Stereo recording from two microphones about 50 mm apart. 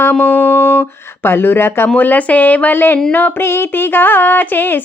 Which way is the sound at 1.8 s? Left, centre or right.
Left.